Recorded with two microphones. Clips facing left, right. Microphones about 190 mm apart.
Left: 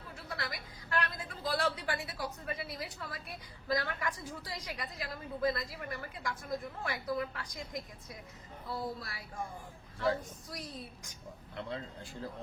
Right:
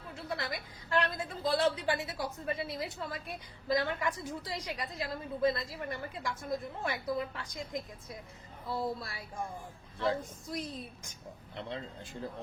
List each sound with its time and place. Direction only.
0.3 s a woman's voice: 25° right (ahead or behind)
9.0 s a woman's voice: 25° right (ahead or behind)